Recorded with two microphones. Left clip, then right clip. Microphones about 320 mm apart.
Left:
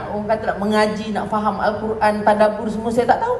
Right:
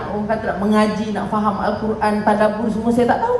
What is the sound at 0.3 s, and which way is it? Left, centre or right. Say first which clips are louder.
A woman's voice: left 1 dB; left.